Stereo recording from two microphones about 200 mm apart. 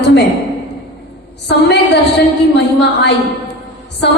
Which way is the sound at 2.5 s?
55° left (ahead or behind).